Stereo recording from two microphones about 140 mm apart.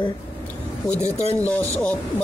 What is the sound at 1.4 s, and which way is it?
Speech, 10° left (ahead or behind).